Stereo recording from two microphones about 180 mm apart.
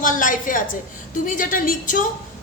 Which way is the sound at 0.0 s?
45° left (ahead or behind).